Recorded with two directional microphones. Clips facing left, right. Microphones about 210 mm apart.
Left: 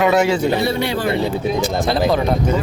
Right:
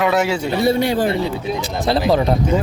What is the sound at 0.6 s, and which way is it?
Speech, 50° right (ahead or behind).